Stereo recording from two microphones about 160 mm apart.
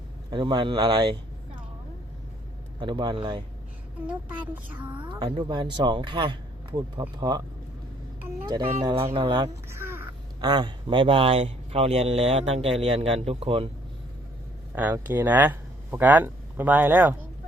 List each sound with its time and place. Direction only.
0.3 s speech: 30° right (ahead or behind)
2.8 s speech: 30° right (ahead or behind)
4.9 s speech: 30° right (ahead or behind)
8.4 s speech: 25° right (ahead or behind)
9.6 s a sound: 15° right (ahead or behind)
10.5 s speech: 30° right (ahead or behind)
14.8 s speech: 10° right (ahead or behind)